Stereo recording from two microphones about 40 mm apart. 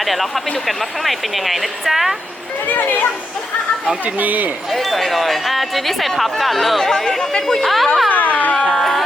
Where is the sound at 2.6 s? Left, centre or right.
Left.